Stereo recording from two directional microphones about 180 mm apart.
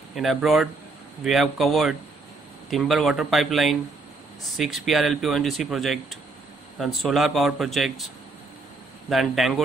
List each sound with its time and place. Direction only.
0.1 s speech: centre (ahead or behind)
9.1 s speech: centre (ahead or behind)